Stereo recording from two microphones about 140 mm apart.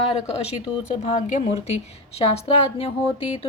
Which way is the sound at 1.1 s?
55° left (ahead or behind).